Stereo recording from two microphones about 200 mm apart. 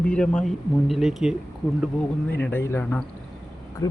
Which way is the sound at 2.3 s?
10° left (ahead or behind).